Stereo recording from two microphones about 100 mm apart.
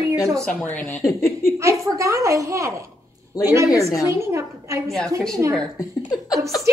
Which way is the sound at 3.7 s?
35° left (ahead or behind).